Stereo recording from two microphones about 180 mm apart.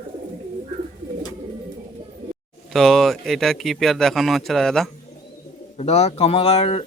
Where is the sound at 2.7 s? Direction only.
Centre (ahead or behind).